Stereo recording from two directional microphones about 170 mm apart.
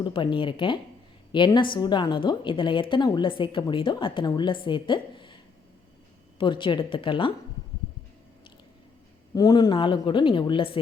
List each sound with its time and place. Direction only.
0.0 s a woman's voice: 30° left (ahead or behind)
6.4 s a woman's voice: 30° left (ahead or behind)
9.3 s a woman's voice: 20° left (ahead or behind)